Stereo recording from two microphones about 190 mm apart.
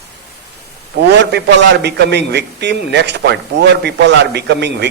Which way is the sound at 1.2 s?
65° right (ahead or behind).